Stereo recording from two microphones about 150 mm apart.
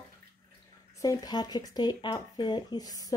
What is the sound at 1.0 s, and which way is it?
Speech, 25° left (ahead or behind).